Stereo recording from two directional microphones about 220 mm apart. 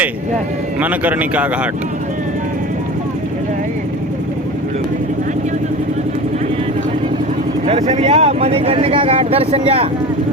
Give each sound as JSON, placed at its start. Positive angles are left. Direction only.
{"t": 0.8, "sound": "a man's voice", "side_deg": -5}
{"t": 7.7, "sound": "speech", "side_deg": -30}